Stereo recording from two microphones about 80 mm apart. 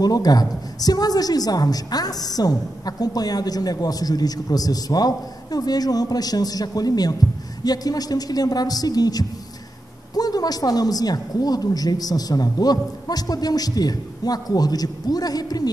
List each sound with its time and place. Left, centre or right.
0.0 s a woman's voice: left